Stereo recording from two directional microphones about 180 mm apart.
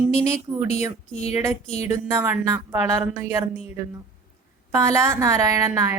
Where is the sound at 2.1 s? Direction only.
15° right (ahead or behind).